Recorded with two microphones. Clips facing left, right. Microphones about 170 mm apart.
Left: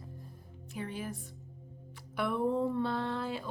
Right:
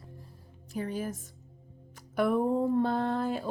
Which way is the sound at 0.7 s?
40° right (ahead or behind).